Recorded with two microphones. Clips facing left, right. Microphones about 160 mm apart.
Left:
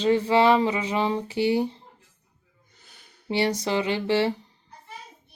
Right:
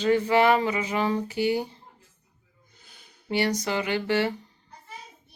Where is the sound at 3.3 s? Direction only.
25° left (ahead or behind).